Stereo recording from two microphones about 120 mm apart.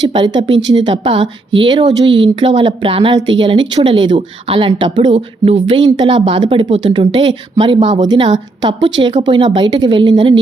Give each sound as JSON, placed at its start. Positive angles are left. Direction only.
{"t": 0.1, "sound": "a woman's voice", "side_deg": -40}